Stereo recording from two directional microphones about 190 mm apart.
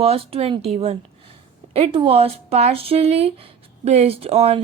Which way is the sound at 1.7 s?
30° right (ahead or behind).